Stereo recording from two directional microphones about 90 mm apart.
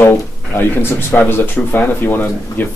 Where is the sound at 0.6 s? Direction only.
25° left (ahead or behind).